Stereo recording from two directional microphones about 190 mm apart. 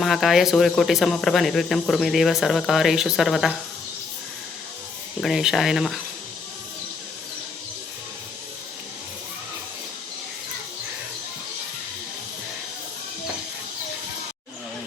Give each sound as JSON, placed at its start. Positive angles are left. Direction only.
{"t": 0.0, "sound": "speech", "side_deg": 0}
{"t": 5.2, "sound": "speech", "side_deg": 0}